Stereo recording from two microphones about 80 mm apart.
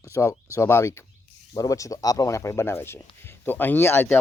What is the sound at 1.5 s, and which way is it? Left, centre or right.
Speech, left.